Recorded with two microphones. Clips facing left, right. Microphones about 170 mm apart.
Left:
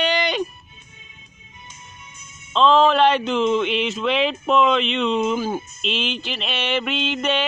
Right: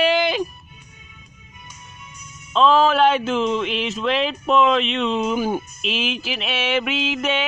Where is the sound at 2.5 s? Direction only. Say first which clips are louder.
Even; 5° right (ahead or behind).